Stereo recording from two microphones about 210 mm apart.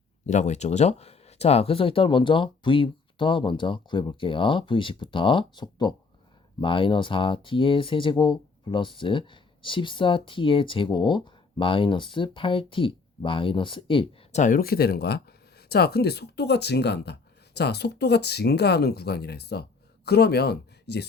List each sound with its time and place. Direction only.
0.3 s speech: 35° left (ahead or behind); by 21.1 s 50° left (ahead or behind)